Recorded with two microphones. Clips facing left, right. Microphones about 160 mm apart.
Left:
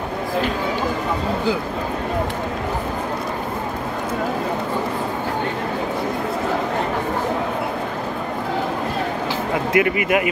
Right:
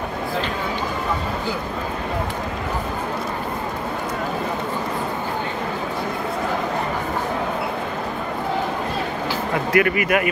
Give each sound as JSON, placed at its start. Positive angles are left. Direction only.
{"t": 9.7, "sound": "speech", "side_deg": 20}